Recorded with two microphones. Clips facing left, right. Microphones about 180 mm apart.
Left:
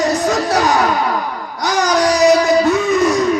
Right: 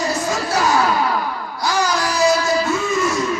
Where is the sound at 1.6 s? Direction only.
15° left (ahead or behind).